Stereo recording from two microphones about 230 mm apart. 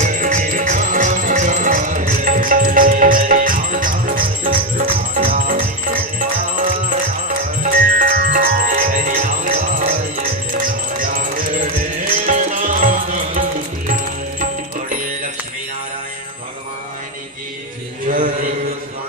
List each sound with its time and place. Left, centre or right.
0.0 s music: right